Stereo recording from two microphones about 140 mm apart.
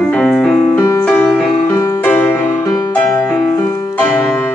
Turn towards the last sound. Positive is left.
turn(degrees=20)  # may be behind; listen again after turning